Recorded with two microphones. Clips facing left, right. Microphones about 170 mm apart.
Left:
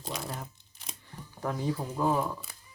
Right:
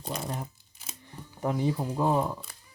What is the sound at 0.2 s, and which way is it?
Crumpling, 20° right (ahead or behind).